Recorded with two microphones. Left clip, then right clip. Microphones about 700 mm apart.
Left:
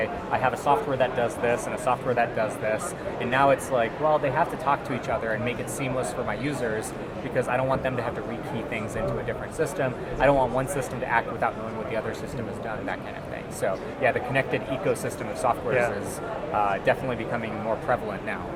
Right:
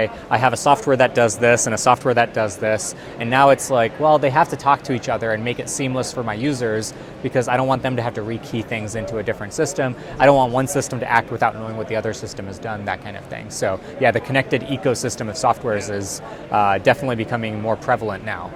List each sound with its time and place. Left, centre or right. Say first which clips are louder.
0.0 s a man's voice: right 7 dB; right
9.2 s speech: right 6 dB; right
13.6 s speech: right 6 dB; right
16.6 s speech: right 8 dB; right